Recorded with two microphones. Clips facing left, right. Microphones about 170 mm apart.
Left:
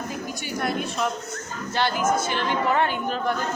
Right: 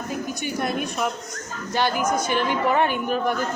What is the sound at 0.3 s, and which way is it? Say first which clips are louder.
Speech: even; 20° right (ahead or behind).